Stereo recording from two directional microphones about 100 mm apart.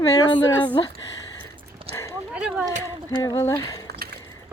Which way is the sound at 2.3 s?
10° right (ahead or behind).